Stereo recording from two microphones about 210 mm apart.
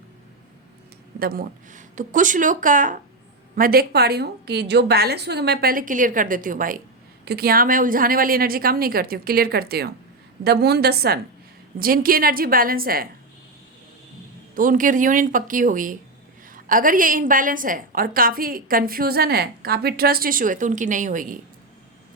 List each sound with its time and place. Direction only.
1.2 s a woman's voice: 45° right (ahead or behind)
14.5 s a woman's voice: 40° right (ahead or behind)